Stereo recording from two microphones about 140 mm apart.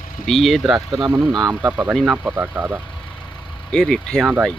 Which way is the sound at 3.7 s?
5° left (ahead or behind).